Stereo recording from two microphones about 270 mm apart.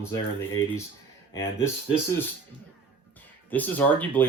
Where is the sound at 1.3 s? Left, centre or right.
Centre.